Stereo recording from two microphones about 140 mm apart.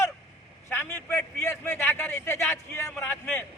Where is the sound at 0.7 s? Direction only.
15° left (ahead or behind).